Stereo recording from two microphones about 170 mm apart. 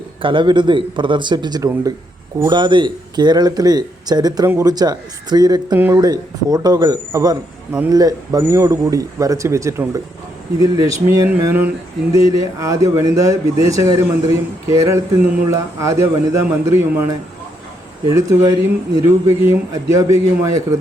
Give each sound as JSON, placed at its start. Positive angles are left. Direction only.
{"t": 0.2, "sound": "speech", "side_deg": -30}
{"t": 5.7, "sound": "a man's voice", "side_deg": -10}
{"t": 6.0, "sound": "a man's voice", "side_deg": -20}